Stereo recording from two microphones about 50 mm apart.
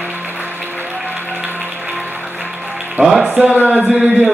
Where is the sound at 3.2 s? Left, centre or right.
Right.